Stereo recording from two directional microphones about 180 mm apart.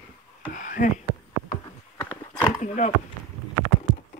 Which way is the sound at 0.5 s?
45° left (ahead or behind).